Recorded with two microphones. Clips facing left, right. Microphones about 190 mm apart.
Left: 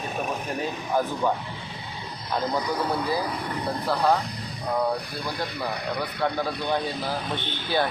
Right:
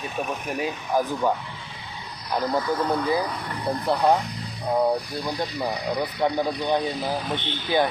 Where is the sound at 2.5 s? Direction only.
15° left (ahead or behind).